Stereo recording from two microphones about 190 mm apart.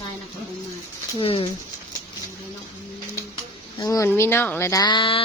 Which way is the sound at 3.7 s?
15° left (ahead or behind).